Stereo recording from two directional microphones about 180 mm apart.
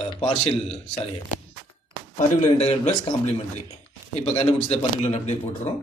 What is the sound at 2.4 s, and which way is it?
Speech, 40° left (ahead or behind).